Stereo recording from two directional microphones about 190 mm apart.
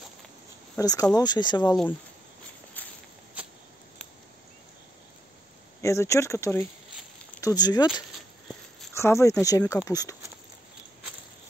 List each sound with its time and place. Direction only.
0.7 s speech: 20° left (ahead or behind)
5.8 s speech: 15° left (ahead or behind)
8.9 s speech: 15° left (ahead or behind)